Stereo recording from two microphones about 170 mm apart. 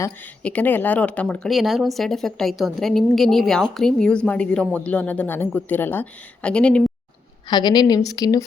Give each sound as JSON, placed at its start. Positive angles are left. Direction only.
{"t": 0.4, "sound": "speech", "side_deg": 10}
{"t": 7.4, "sound": "a woman's voice", "side_deg": 25}